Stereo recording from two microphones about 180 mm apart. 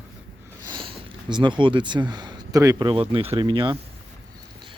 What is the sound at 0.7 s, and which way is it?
Speech, 30° right (ahead or behind).